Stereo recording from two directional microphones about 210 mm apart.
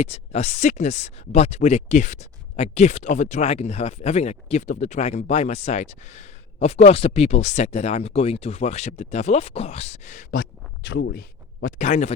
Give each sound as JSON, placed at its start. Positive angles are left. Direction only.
{"t": 0.0, "sound": "speech", "side_deg": 30}